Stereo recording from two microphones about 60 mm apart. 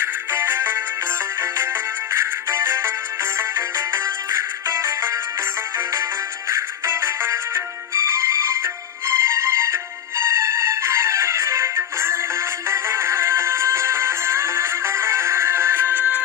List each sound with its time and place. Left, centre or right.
0.0 s music: right